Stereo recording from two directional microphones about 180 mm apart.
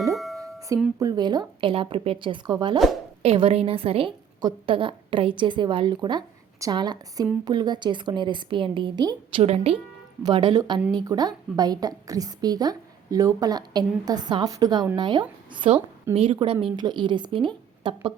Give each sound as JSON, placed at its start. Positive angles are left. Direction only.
{"t": 0.1, "sound": "music", "side_deg": 0}
{"t": 0.9, "sound": "a woman's voice", "side_deg": -20}